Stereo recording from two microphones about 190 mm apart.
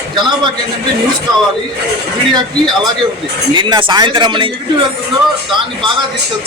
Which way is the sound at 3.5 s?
25° right (ahead or behind).